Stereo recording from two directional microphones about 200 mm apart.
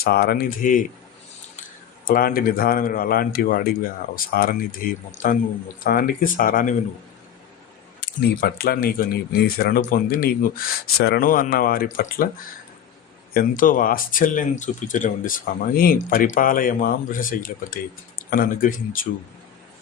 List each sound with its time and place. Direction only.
0.0 s speech: 50° left (ahead or behind)
2.0 s speech: 45° left (ahead or behind)
8.0 s speech: 50° left (ahead or behind)
13.6 s speech: 45° left (ahead or behind)